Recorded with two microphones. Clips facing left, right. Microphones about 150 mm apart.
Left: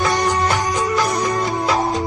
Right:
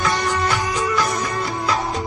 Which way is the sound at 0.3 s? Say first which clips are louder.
Left 3 dB; 40° left (ahead or behind).